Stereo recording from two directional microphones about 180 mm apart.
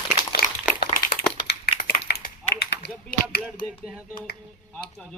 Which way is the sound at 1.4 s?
55° left (ahead or behind).